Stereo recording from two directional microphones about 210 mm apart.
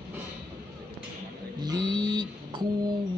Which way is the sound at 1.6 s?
20° right (ahead or behind).